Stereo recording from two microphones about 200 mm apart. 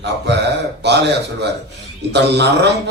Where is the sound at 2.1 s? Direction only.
60° right (ahead or behind).